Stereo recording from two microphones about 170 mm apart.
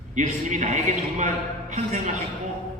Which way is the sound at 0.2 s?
45° right (ahead or behind).